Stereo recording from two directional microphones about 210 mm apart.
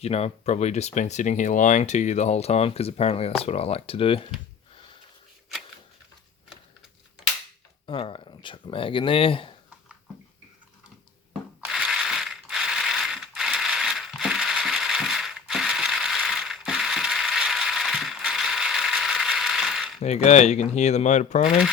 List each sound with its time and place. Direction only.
0.0 s speech: 30° left (ahead or behind)
7.9 s speech: 25° left (ahead or behind)
11.6 s mechanisms: 5° right (ahead or behind)
20.0 s speech: 30° left (ahead or behind)